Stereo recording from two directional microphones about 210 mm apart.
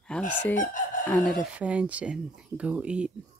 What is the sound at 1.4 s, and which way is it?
Speech, 5° right (ahead or behind).